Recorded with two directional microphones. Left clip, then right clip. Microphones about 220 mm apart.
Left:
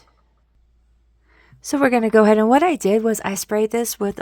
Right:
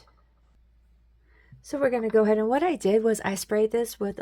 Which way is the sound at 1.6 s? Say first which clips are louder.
Left 7 dB; 45° left (ahead or behind).